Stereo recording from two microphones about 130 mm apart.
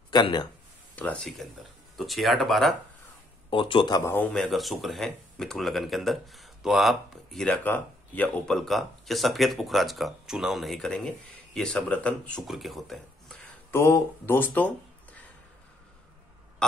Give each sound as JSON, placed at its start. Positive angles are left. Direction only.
{"t": 0.1, "sound": "speech", "side_deg": 35}
{"t": 0.9, "sound": "speech", "side_deg": 10}
{"t": 3.4, "sound": "speech", "side_deg": 40}
{"t": 4.0, "sound": "speech", "side_deg": 15}
{"t": 13.7, "sound": "speech", "side_deg": 20}